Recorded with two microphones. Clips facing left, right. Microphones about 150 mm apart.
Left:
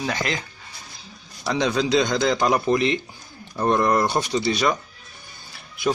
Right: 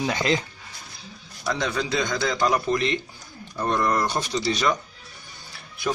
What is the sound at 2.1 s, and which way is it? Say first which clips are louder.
A man's voice: left 3 dB; 20° left (ahead or behind).